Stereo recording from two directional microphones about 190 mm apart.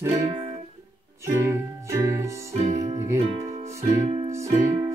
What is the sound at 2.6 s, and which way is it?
Music, 35° right (ahead or behind).